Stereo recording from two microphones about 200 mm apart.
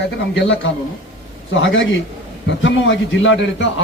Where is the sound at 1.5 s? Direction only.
65° left (ahead or behind).